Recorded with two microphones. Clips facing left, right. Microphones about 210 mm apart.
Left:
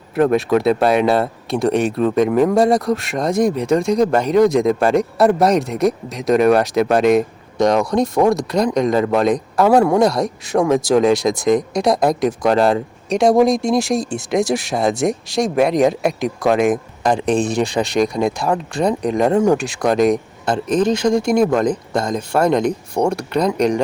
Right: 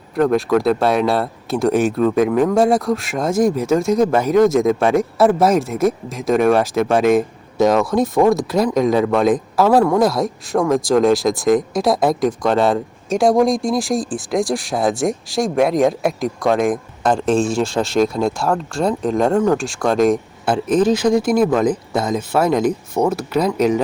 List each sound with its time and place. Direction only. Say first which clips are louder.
0.2 s speech: left 1 dB; 5° left (ahead or behind)
17.2 s speech: even; 15° left (ahead or behind)
20.4 s speech: right 2 dB; 5° right (ahead or behind)